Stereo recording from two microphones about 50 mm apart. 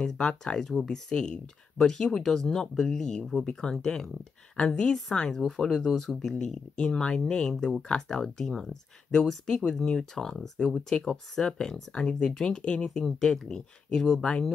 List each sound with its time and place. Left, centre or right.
0.0 s speech: centre